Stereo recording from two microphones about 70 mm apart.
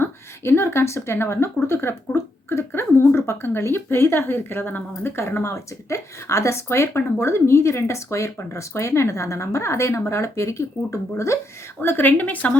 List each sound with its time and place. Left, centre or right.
0.0 s speech: left
11.8 s a woman's voice: left